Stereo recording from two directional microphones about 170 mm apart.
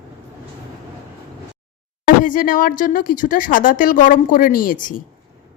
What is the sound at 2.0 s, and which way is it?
Speech, 50° left (ahead or behind).